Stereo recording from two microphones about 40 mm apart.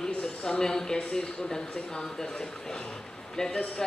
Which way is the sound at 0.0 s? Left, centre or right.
Centre.